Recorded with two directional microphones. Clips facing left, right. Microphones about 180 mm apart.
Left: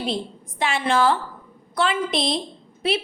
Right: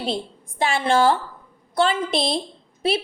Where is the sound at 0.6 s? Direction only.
30° right (ahead or behind).